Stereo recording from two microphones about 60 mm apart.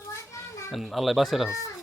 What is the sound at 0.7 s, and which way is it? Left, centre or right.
Speech, centre.